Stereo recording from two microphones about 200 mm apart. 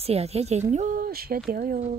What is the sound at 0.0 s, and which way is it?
Speech, 30° right (ahead or behind).